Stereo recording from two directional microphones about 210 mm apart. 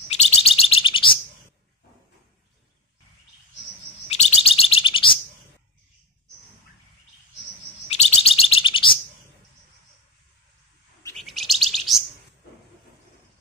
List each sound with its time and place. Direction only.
0.1 s bird: 30° left (ahead or behind)
4.1 s bird: 30° left (ahead or behind)
7.9 s bird: 30° left (ahead or behind)
11.1 s chirp: centre (ahead or behind)